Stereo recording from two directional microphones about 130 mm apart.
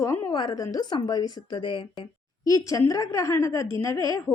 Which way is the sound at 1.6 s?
40° left (ahead or behind).